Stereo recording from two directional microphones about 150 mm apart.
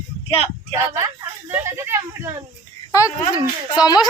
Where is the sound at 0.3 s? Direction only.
40° left (ahead or behind).